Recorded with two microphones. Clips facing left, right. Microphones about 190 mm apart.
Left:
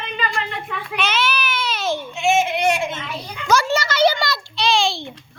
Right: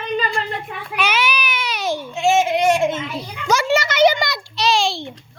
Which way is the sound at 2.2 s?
40° right (ahead or behind).